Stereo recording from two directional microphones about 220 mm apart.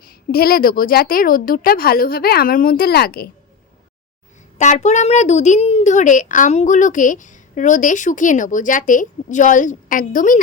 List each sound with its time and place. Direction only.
0.0 s a woman's voice: 45° left (ahead or behind)
4.5 s a woman's voice: 35° left (ahead or behind)